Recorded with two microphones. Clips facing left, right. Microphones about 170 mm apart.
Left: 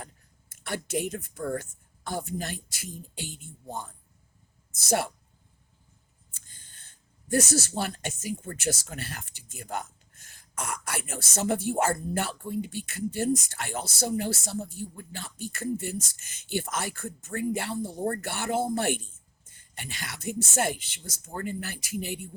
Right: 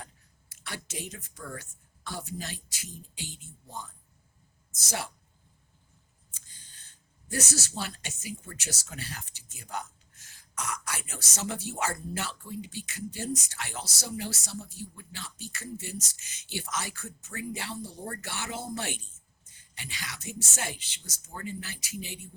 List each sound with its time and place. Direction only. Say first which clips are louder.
0.5 s speech: left 10 dB; 50° left (ahead or behind)
6.3 s speech: left 1 dB; 55° left (ahead or behind)